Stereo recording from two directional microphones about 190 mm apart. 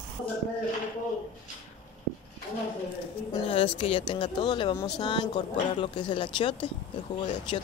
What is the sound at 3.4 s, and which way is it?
Speech, 30° left (ahead or behind).